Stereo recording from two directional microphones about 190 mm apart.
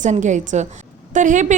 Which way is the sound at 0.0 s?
40° right (ahead or behind).